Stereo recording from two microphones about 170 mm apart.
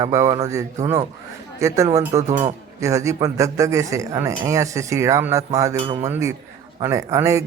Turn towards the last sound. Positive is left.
turn(degrees=-20)  # may be behind; listen again after turning